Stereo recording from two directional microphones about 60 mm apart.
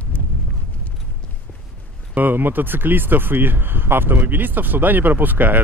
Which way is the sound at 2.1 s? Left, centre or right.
Right.